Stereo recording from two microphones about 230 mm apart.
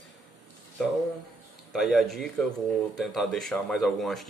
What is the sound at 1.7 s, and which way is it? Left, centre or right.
A man's voice, centre.